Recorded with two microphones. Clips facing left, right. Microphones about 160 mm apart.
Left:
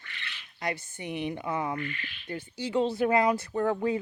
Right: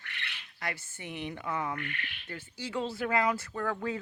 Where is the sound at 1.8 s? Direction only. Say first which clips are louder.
Left 4 dB; 65° right (ahead or behind).